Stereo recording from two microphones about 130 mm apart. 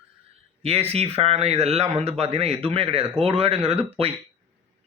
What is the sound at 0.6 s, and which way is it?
Speech, 50° right (ahead or behind).